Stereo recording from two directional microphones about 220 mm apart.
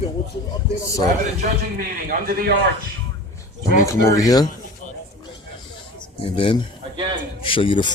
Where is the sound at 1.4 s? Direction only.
40° right (ahead or behind).